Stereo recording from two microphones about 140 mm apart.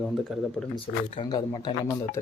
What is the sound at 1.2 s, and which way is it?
Speech, 30° left (ahead or behind).